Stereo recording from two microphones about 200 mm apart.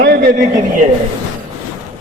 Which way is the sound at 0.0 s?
50° right (ahead or behind).